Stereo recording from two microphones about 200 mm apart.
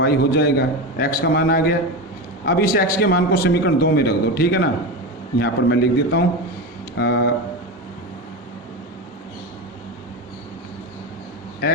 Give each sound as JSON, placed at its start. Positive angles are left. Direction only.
{"t": 0.0, "sound": "a man's voice", "side_deg": 50}